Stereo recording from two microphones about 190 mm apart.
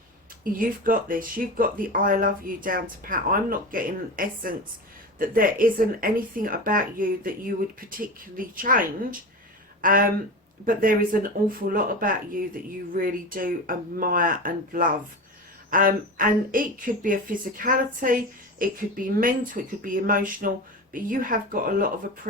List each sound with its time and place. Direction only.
0.4 s speech: 50° right (ahead or behind)